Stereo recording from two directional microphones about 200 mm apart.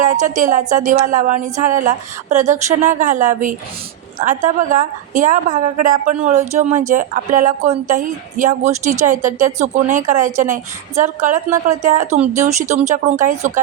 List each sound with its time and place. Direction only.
0.0 s speech: 40° right (ahead or behind)